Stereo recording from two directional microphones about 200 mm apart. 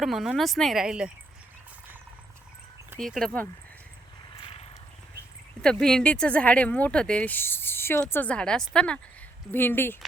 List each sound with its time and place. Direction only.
0.0 s speech: centre (ahead or behind)
3.0 s speech: centre (ahead or behind)
4.4 s vehicle: 25° left (ahead or behind)
5.6 s speech: 5° left (ahead or behind)